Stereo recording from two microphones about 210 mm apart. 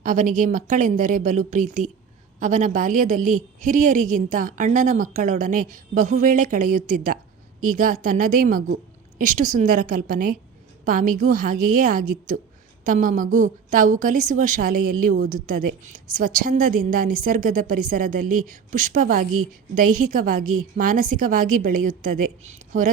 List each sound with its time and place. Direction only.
0.0 s a woman's voice: 35° right (ahead or behind)